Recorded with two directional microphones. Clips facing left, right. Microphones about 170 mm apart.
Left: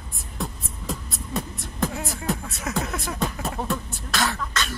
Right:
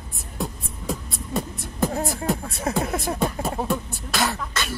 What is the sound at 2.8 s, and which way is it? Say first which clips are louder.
Speech: right 2 dB; 50° right (ahead or behind).